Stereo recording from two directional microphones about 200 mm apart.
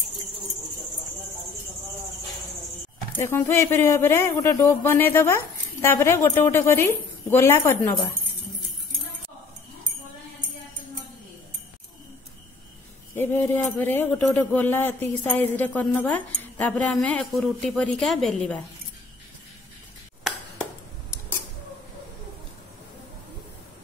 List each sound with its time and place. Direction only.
3.2 s speech: 10° left (ahead or behind)
13.1 s speech: 10° left (ahead or behind)